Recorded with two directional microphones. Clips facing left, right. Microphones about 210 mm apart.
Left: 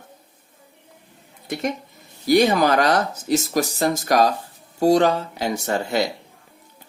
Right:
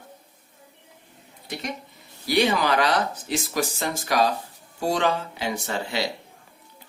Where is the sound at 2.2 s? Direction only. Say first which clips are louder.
Left 6 dB; 45° left (ahead or behind).